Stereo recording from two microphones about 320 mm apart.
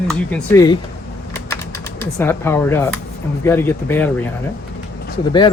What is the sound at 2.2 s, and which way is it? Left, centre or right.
Speech, centre.